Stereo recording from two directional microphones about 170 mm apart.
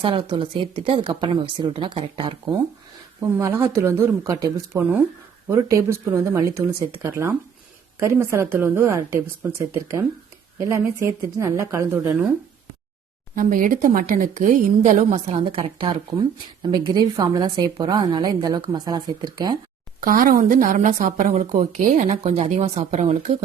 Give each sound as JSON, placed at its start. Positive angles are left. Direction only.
{"t": 0.0, "sound": "a woman's voice", "side_deg": -30}
{"t": 3.2, "sound": "speech", "side_deg": -15}
{"t": 13.3, "sound": "a woman's voice", "side_deg": -50}
{"t": 20.0, "sound": "a woman's voice", "side_deg": -55}